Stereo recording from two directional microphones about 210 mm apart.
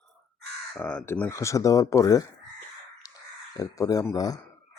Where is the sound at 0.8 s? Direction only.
5° left (ahead or behind).